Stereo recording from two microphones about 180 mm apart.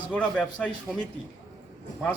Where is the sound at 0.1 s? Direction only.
5° left (ahead or behind).